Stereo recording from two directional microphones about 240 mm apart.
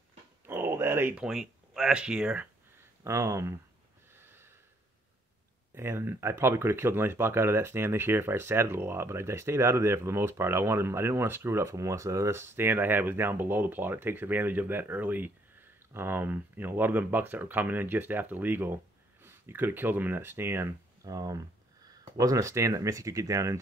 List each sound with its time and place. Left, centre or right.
0.5 s speech: centre
4.2 s snort: centre
5.8 s speech: centre